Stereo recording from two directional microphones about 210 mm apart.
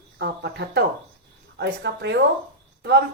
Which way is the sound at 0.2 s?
50° right (ahead or behind).